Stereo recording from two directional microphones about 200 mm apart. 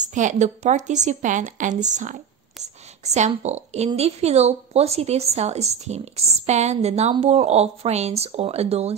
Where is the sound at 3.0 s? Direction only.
35° right (ahead or behind).